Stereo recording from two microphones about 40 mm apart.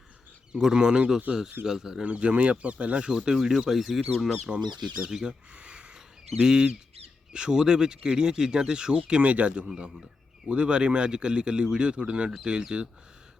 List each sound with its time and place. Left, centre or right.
0.7 s speech: centre
2.0 s speech: right
3.1 s speech: centre
4.4 s speech: right
5.5 s a sound: right
6.4 s speech: centre
9.0 s speech: right
9.6 s speech: centre
10.5 s speech: right